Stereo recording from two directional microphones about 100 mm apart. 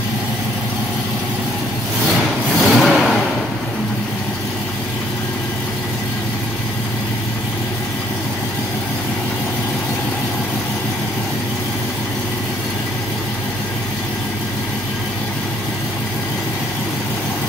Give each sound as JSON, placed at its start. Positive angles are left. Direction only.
{"t": 2.6, "sound": "vehicle", "side_deg": 0}